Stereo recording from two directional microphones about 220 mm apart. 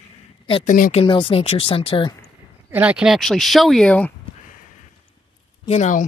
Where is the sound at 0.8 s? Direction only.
40° left (ahead or behind).